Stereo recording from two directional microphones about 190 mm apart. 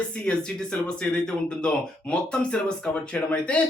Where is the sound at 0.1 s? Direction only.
5° left (ahead or behind).